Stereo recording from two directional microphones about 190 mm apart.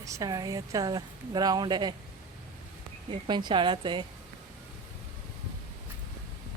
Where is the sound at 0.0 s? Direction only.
15° right (ahead or behind).